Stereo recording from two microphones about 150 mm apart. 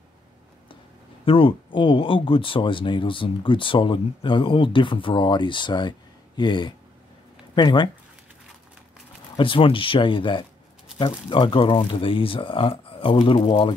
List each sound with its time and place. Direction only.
1.2 s speech: 35° left (ahead or behind)
9.4 s speech: 35° left (ahead or behind)